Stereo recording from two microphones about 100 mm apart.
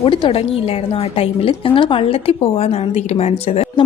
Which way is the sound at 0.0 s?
60° left (ahead or behind).